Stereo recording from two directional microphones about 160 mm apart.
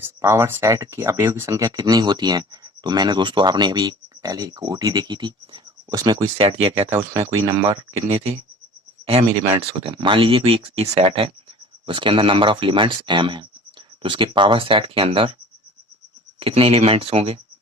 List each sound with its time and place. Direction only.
0.0 s speech: 15° right (ahead or behind); by 6.8 s 35° right (ahead or behind)
6.9 s speech: 20° right (ahead or behind)
7.7 s speech: 35° right (ahead or behind)
16.4 s speech: 35° right (ahead or behind)